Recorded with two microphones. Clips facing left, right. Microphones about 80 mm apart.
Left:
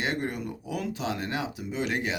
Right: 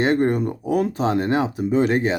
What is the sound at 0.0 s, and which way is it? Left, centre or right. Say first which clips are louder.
Speech: right 12 dB; right.